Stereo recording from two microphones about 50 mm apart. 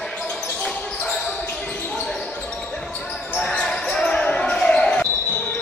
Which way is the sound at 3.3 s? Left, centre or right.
Centre.